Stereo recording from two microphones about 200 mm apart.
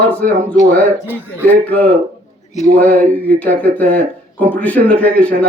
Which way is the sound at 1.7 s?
5° left (ahead or behind).